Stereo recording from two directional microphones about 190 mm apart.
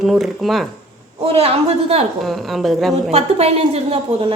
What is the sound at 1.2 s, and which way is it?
Speech, 30° right (ahead or behind).